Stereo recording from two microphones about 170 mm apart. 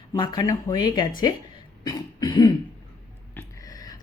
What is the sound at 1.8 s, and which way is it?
Cough, 25° left (ahead or behind).